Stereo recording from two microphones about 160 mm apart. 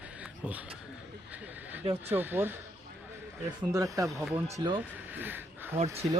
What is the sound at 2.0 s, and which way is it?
Speech, 15° right (ahead or behind).